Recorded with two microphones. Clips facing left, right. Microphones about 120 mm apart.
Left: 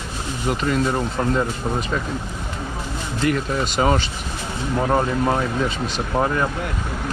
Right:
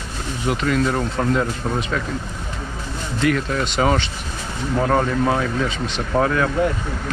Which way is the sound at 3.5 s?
5° left (ahead or behind).